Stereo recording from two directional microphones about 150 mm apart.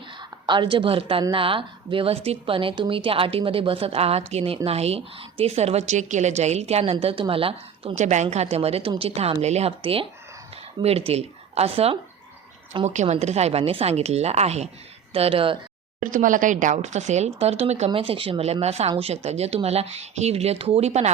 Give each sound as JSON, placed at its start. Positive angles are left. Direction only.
{"t": 0.2, "sound": "a woman's voice", "side_deg": -30}
{"t": 16.0, "sound": "speech", "side_deg": -60}